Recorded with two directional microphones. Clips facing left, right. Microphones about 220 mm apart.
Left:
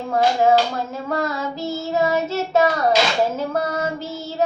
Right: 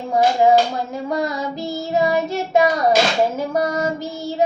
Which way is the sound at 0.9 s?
15° right (ahead or behind).